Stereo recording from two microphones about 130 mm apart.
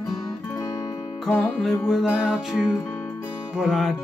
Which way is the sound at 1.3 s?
5° left (ahead or behind).